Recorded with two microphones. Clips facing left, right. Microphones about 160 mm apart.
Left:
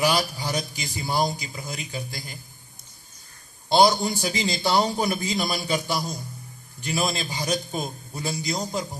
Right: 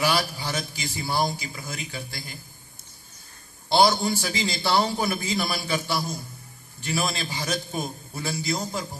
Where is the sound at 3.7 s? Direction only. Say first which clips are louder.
Left 1 dB; 15° left (ahead or behind).